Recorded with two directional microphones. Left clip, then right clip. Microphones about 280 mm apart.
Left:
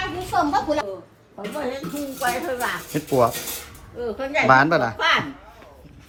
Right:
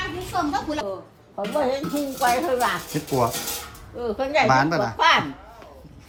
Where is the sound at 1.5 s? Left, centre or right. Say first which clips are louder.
Right 5 dB; right.